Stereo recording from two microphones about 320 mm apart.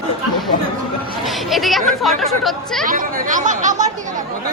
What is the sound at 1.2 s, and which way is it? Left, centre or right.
Speech, centre.